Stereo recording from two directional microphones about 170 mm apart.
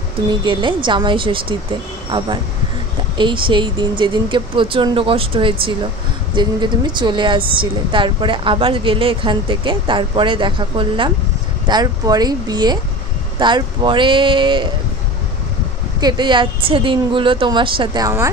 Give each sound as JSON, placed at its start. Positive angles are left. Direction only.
{"t": 0.3, "sound": "a woman's voice", "side_deg": -25}
{"t": 16.0, "sound": "a woman's voice", "side_deg": -25}